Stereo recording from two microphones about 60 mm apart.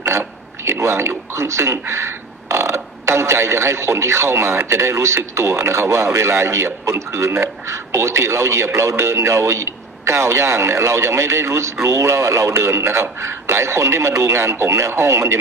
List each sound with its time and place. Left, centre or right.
0.6 s speech: right